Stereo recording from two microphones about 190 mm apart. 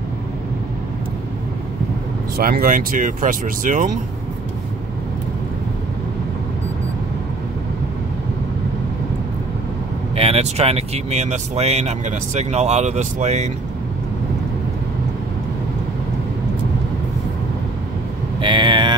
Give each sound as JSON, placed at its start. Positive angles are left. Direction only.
{"t": 2.3, "sound": "speech", "side_deg": -50}
{"t": 10.1, "sound": "speech", "side_deg": -30}
{"t": 18.4, "sound": "vehicle", "side_deg": -25}